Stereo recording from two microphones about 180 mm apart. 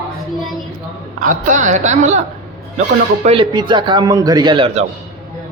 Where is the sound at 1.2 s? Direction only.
45° right (ahead or behind).